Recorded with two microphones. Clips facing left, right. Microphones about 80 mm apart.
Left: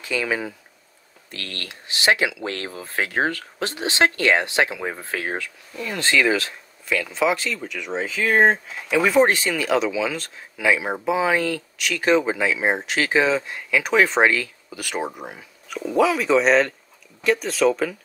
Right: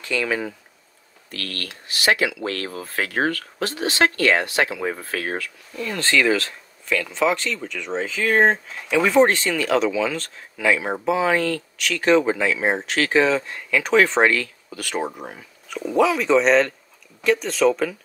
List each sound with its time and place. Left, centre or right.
0.0 s speech: centre
1.3 s speech: left; by 17.9 s centre